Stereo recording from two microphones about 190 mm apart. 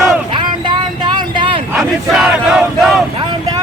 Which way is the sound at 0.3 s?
25° right (ahead or behind).